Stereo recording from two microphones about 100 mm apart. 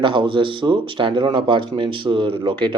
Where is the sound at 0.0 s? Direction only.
55° right (ahead or behind).